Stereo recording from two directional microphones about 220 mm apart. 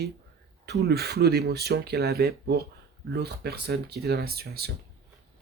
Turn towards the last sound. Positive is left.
turn(degrees=-45)  # may be behind; listen again after turning